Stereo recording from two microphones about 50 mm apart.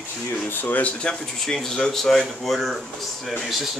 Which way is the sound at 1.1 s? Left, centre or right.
Centre.